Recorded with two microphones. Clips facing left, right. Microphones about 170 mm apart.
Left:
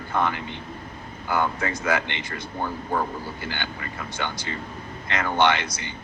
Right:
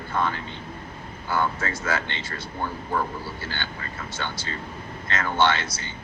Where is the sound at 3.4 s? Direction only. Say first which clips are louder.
Left 2 dB; 15° left (ahead or behind).